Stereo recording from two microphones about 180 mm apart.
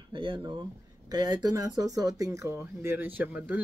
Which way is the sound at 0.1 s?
30° right (ahead or behind).